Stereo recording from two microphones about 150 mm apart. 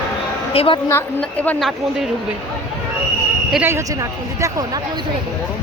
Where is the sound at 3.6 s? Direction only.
20° right (ahead or behind).